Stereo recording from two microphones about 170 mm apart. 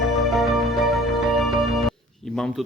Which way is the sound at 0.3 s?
Centre (ahead or behind).